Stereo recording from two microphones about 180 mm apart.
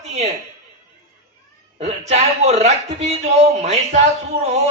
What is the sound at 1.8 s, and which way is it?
Speech, 35° right (ahead or behind).